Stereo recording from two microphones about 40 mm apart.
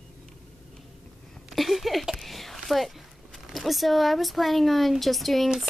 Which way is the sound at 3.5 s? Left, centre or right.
Centre.